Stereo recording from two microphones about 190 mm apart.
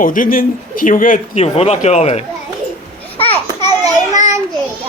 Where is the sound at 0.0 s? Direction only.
45° left (ahead or behind).